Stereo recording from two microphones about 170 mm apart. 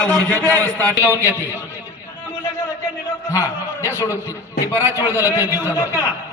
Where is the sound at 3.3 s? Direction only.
20° left (ahead or behind).